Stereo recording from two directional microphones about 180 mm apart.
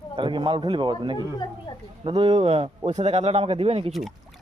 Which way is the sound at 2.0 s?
25° right (ahead or behind).